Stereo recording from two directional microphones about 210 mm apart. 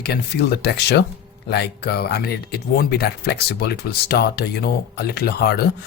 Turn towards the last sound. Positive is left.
turn(degrees=50)  # may be behind; listen again after turning